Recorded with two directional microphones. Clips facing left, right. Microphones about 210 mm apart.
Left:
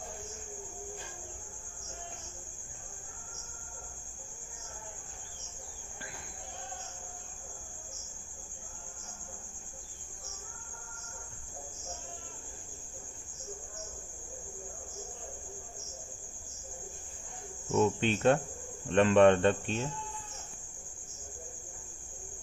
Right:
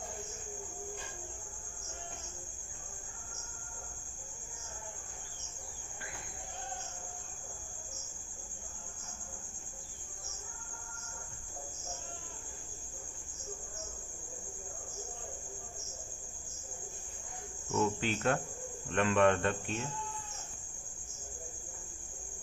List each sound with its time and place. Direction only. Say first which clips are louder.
17.7 s speech: left 5 dB; 25° left (ahead or behind)